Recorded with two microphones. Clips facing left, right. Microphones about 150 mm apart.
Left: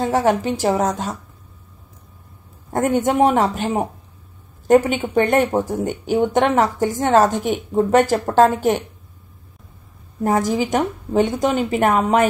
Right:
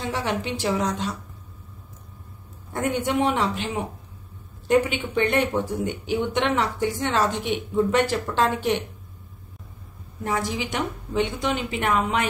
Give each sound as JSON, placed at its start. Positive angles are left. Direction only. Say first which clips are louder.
{"t": 0.0, "sound": "speech", "louder": "left 9 dB", "side_deg": 45}
{"t": 2.7, "sound": "speech", "louder": "left 6 dB", "side_deg": 45}
{"t": 10.2, "sound": "speech", "louder": "left 8 dB", "side_deg": 45}